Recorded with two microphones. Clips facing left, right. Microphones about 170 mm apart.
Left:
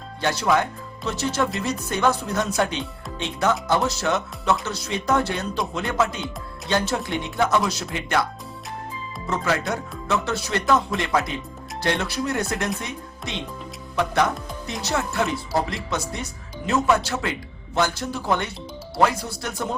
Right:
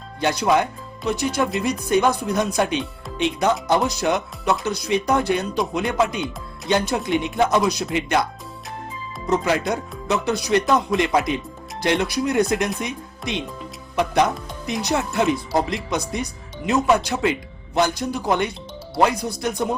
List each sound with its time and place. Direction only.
0.2 s speech: 15° right (ahead or behind)